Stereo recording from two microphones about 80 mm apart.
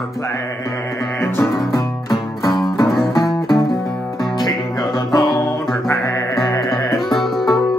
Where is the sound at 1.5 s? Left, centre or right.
Left.